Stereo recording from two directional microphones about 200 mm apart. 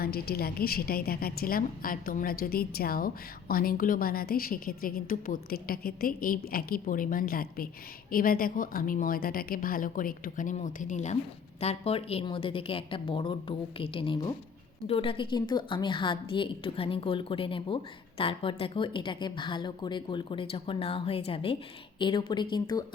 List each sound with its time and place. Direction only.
0.0 s a woman's voice: 50° left (ahead or behind); by 22.8 s 20° left (ahead or behind)